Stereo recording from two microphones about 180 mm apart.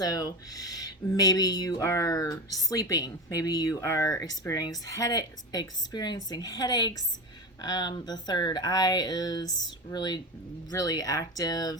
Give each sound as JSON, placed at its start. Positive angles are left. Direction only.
{"t": 0.0, "sound": "speech", "side_deg": 20}